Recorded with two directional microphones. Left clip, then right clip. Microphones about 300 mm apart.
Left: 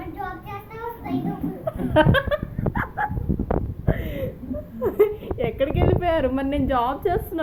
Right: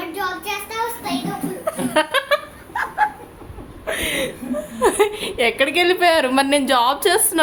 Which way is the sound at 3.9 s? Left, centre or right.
Centre.